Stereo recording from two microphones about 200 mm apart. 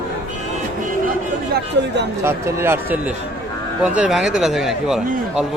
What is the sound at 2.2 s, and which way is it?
Speech, 10° right (ahead or behind).